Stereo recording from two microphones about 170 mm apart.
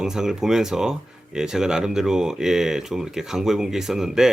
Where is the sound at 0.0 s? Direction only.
5° right (ahead or behind).